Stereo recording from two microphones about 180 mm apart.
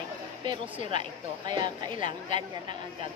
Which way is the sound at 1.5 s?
25° right (ahead or behind).